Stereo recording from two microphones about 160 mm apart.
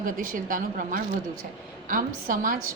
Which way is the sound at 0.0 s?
60° right (ahead or behind).